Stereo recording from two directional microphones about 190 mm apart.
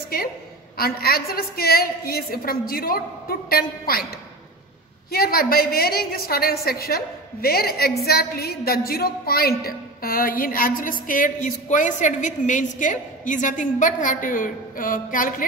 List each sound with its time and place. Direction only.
0.7 s a woman's voice: 50° left (ahead or behind)
5.1 s a woman's voice: 55° left (ahead or behind)